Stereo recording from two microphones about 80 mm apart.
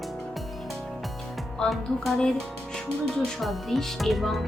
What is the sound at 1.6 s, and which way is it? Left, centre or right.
Speech, centre.